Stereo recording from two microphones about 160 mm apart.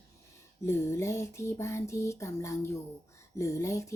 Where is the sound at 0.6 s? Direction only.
15° left (ahead or behind).